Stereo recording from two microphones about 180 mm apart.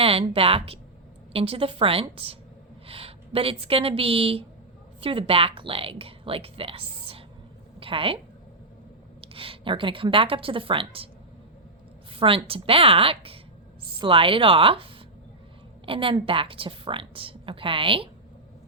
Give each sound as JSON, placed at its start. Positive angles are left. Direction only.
{"t": 0.0, "sound": "a woman's voice", "side_deg": -30}
{"t": 9.2, "sound": "a woman's voice", "side_deg": -30}
{"t": 12.1, "sound": "a woman's voice", "side_deg": -30}
{"t": 15.9, "sound": "a woman's voice", "side_deg": -30}